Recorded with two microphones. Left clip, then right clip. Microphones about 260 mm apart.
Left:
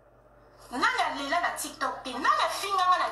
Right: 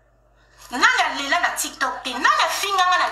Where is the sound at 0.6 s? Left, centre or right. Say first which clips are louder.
Right 9 dB; right.